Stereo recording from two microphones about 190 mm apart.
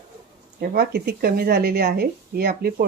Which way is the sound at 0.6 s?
55° right (ahead or behind).